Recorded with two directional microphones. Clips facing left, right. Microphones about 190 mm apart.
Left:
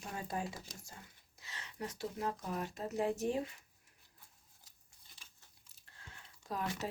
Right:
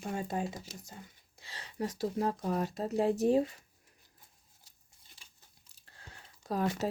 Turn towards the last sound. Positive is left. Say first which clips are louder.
# right 8 dB
turn(degrees=-35)  # may be behind; listen again after turning